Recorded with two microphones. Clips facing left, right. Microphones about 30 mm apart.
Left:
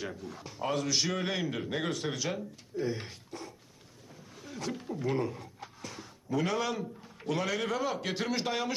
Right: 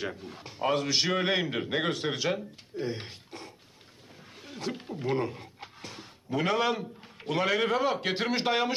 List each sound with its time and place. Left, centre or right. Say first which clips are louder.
0.2 s a man's voice: right 4 dB; right
4.4 s a sound: right 2 dB; right
7.2 s a man's voice: right 5 dB; right